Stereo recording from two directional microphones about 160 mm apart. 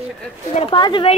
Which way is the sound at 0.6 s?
30° left (ahead or behind).